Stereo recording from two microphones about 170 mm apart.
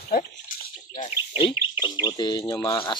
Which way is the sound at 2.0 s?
25° left (ahead or behind).